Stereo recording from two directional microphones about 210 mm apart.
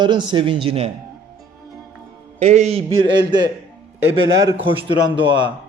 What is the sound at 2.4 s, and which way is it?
Speech, 30° right (ahead or behind).